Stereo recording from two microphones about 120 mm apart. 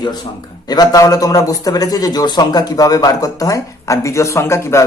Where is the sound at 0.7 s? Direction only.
30° left (ahead or behind).